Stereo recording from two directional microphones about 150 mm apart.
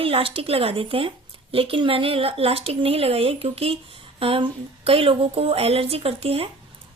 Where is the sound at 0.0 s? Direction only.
40° right (ahead or behind).